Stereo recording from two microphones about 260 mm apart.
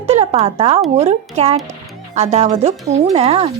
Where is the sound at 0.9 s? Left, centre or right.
Right.